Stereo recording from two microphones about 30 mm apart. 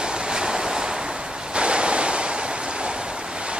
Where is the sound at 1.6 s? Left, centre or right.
Right.